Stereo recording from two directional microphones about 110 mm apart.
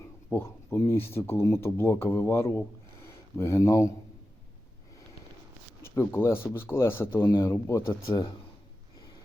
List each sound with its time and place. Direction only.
0.3 s speech: 20° left (ahead or behind)
5.8 s speech: 20° left (ahead or behind)
8.1 s speech: 40° left (ahead or behind)